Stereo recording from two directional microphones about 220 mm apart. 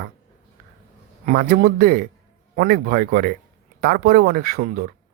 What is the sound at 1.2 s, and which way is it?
A man's voice, 40° right (ahead or behind).